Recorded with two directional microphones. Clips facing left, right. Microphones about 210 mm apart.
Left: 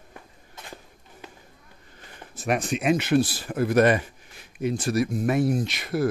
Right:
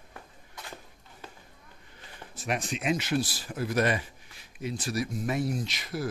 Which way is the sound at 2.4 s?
55° left (ahead or behind).